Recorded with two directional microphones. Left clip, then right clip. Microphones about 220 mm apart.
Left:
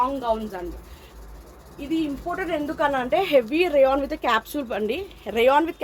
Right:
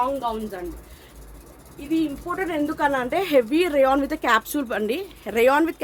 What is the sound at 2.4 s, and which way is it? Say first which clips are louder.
A woman's voice: right 1 dB; 20° right (ahead or behind).